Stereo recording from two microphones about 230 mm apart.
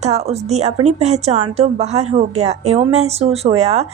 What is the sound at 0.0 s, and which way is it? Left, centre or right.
A woman's voice, right.